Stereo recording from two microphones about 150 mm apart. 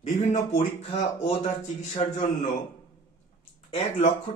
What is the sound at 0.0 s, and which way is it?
Speech, 55° left (ahead or behind).